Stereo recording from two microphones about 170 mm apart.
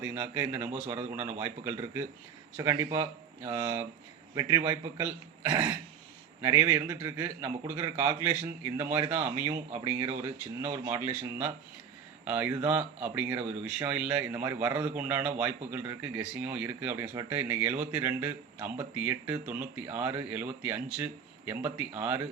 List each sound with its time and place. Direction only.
0.0 s a man's voice: 10° right (ahead or behind); by 5.7 s 25° right (ahead or behind)
6.4 s speech: 15° right (ahead or behind)